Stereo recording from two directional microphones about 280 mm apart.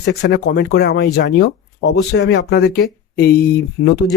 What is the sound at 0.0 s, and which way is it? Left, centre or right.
Speech, left.